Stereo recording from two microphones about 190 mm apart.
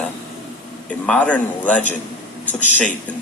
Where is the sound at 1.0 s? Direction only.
5° left (ahead or behind).